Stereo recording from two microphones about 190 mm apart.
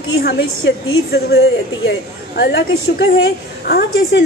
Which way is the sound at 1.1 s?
60° left (ahead or behind).